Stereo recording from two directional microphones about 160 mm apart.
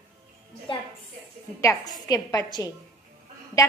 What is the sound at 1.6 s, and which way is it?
A woman's voice, 20° left (ahead or behind).